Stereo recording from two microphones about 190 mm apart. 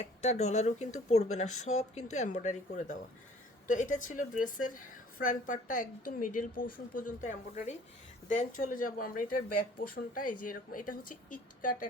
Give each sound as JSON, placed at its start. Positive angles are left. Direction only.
{"t": 0.0, "sound": "speech", "side_deg": 35}